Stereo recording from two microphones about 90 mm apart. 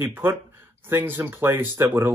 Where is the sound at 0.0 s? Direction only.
25° right (ahead or behind).